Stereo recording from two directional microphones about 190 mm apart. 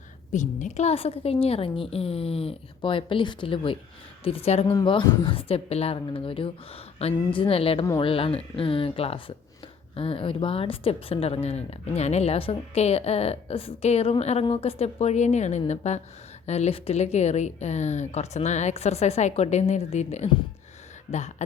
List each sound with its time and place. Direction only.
0.3 s a woman's voice: 40° left (ahead or behind)